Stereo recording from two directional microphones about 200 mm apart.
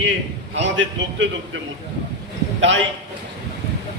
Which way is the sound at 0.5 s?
65° right (ahead or behind).